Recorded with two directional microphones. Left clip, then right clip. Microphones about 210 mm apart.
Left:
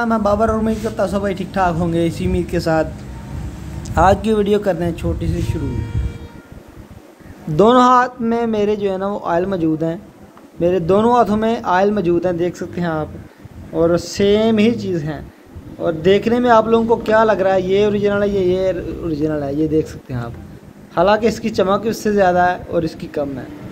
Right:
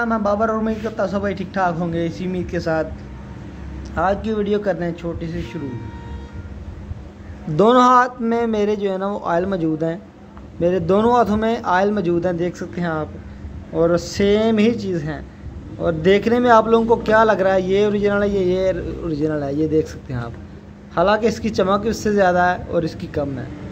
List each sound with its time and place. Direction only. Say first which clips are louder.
0.0 s a man's voice: left 3 dB; 15° left (ahead or behind)
3.9 s a man's voice: left 6 dB; 25° left (ahead or behind)
7.5 s a man's voice: left 2 dB; 10° left (ahead or behind)